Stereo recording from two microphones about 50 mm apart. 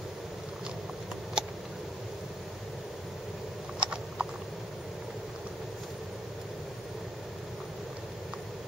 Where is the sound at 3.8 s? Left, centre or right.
Centre.